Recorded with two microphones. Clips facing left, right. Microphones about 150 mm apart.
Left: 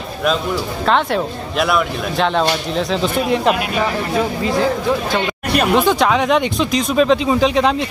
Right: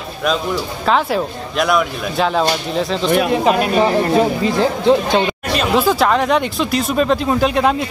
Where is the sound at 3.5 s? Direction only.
35° right (ahead or behind).